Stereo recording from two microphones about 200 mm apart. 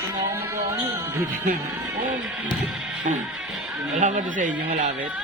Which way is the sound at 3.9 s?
35° right (ahead or behind).